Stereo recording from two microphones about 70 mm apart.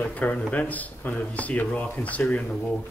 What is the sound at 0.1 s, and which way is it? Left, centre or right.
Speech, centre.